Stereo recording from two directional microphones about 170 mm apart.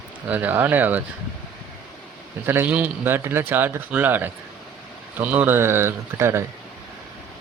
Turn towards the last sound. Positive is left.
turn(degrees=-15)  # may be behind; listen again after turning